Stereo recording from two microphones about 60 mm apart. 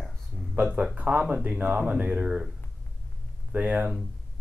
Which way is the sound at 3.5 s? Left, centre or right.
Right.